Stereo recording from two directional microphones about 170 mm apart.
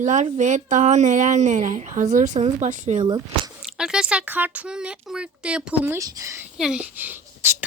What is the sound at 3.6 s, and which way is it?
Speech, 5° right (ahead or behind).